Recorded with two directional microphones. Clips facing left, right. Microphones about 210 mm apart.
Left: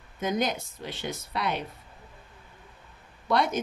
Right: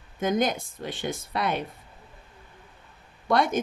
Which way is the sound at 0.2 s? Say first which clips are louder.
Right 3 dB; 50° right (ahead or behind).